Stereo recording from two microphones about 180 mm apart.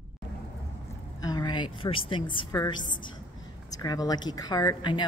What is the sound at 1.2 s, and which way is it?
Speech, 20° left (ahead or behind).